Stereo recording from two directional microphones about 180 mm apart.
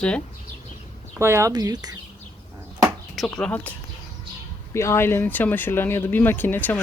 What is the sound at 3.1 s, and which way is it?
Speech, centre (ahead or behind).